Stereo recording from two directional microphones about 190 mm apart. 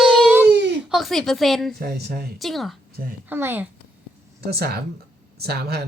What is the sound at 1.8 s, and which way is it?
Speech, 55° right (ahead or behind).